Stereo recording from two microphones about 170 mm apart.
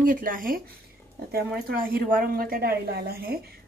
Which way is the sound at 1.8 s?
55° right (ahead or behind).